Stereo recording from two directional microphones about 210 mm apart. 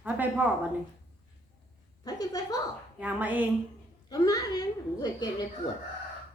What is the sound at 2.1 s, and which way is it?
Speech, 15° left (ahead or behind).